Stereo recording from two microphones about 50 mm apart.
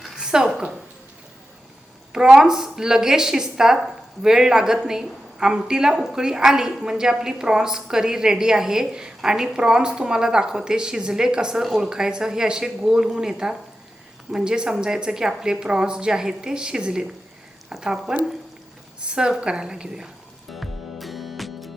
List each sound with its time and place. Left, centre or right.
0.2 s a sound: centre
2.1 s a woman's voice: centre
20.5 s music: centre